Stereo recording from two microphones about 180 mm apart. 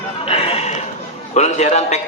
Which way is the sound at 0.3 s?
35° left (ahead or behind).